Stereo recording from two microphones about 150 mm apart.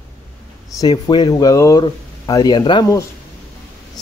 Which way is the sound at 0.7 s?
25° left (ahead or behind).